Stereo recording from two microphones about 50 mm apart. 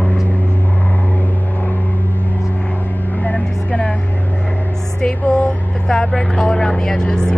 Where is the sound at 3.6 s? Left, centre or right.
Left.